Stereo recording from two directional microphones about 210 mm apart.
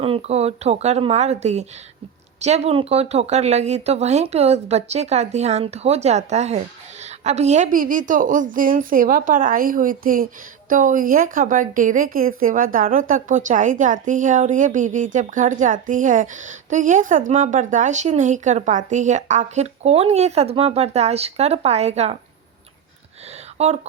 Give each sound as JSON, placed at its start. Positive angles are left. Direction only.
{"t": 0.0, "sound": "speech", "side_deg": -30}
{"t": 23.6, "sound": "speech", "side_deg": -30}